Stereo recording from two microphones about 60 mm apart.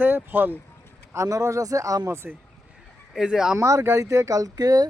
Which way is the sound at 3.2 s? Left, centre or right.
Centre.